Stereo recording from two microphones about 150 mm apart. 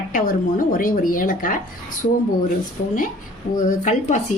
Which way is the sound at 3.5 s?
55° left (ahead or behind).